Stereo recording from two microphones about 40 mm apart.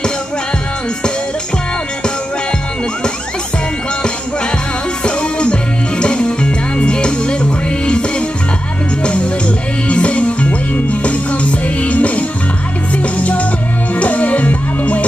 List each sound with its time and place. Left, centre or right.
5.0 s music: left
9.0 s music: left